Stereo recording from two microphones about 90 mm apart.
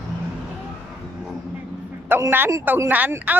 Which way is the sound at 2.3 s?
20° right (ahead or behind).